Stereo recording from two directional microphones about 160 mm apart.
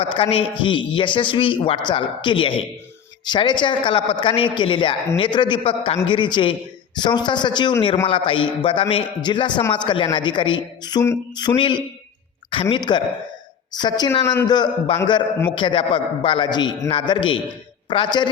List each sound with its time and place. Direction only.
0.0 s a man's voice: 35° left (ahead or behind)